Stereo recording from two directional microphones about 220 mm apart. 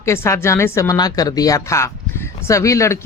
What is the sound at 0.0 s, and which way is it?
Speech, 10° left (ahead or behind).